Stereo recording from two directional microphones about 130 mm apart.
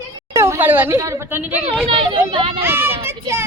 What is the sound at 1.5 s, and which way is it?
Speech, 60° right (ahead or behind).